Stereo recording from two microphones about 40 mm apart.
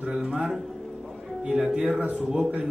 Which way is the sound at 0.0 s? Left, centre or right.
Right.